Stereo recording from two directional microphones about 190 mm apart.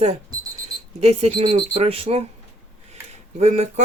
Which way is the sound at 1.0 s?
35° right (ahead or behind).